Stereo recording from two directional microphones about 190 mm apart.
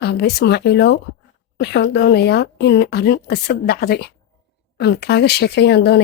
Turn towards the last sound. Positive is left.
turn(degrees=60)  # may be behind; listen again after turning